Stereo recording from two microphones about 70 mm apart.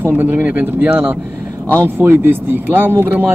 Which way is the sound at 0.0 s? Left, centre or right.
Right.